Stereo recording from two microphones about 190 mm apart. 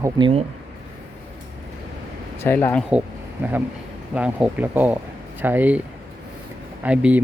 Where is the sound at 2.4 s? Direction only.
10° left (ahead or behind).